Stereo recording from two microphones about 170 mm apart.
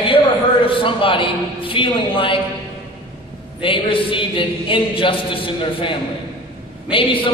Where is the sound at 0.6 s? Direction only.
30° left (ahead or behind).